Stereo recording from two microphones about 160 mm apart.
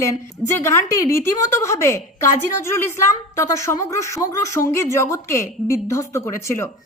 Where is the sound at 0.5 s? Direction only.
15° left (ahead or behind).